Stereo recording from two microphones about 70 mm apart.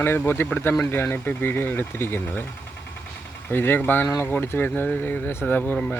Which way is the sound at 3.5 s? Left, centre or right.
Left.